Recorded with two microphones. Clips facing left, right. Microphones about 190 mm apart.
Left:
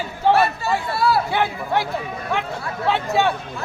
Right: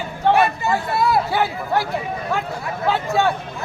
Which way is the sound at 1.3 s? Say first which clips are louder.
Right 1 dB; centre (ahead or behind).